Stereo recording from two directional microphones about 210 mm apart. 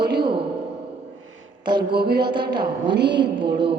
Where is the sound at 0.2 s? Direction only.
25° right (ahead or behind).